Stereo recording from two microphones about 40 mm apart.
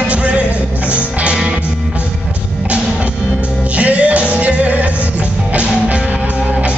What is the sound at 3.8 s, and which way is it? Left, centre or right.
Music, right.